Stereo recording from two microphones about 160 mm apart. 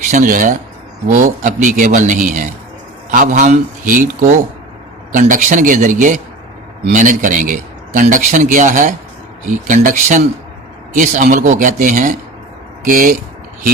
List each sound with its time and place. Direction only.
0.1 s a man's voice: 55° right (ahead or behind)